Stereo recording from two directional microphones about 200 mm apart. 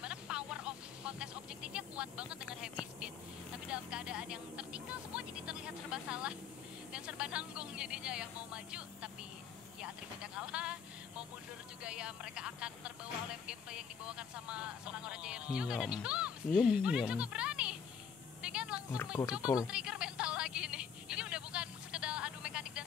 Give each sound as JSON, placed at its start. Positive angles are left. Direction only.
{"t": 0.0, "sound": "music", "side_deg": -5}
{"t": 6.9, "sound": "speech", "side_deg": -5}
{"t": 17.1, "sound": "music", "side_deg": -5}
{"t": 18.4, "sound": "a sound", "side_deg": -5}
{"t": 19.4, "sound": "speech", "side_deg": 20}
{"t": 19.7, "sound": "a sound", "side_deg": -5}